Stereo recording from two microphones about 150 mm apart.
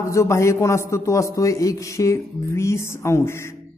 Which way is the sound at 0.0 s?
20° left (ahead or behind).